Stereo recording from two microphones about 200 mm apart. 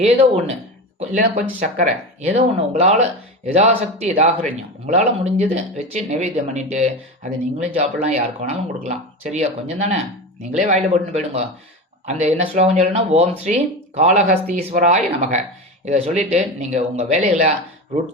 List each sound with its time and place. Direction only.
0.0 s speech: 30° right (ahead or behind)